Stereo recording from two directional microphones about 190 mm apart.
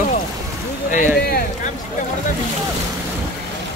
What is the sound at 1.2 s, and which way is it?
Speech, 55° left (ahead or behind).